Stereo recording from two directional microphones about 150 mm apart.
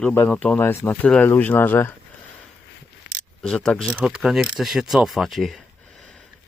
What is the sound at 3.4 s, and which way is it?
Speech, 5° left (ahead or behind).